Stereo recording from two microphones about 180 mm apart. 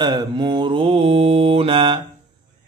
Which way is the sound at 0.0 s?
25° right (ahead or behind).